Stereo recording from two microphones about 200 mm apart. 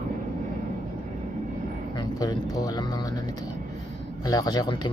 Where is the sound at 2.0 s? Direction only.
20° left (ahead or behind).